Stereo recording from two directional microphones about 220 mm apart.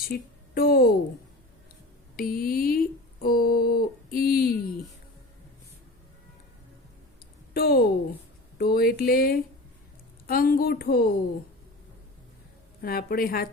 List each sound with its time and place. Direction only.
0.1 s a woman's voice: 40° left (ahead or behind)
2.1 s speech: 40° left (ahead or behind)
7.5 s a woman's voice: 45° left (ahead or behind)
12.8 s speech: 45° left (ahead or behind)